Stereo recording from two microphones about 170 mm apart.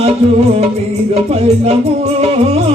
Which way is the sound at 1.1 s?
40° right (ahead or behind).